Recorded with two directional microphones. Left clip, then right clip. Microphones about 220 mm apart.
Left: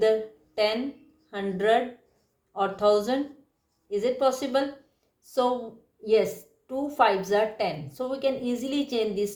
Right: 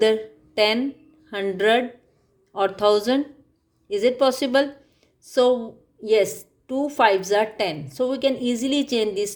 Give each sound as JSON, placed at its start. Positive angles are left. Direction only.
{"t": 0.0, "sound": "a woman's voice", "side_deg": -50}